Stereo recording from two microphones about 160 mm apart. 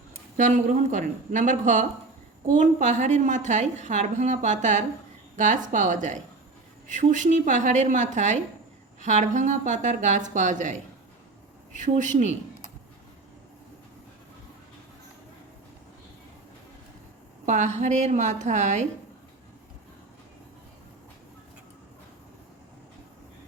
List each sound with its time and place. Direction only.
0.3 s a woman's voice: 50° right (ahead or behind)
17.4 s a woman's voice: 50° right (ahead or behind)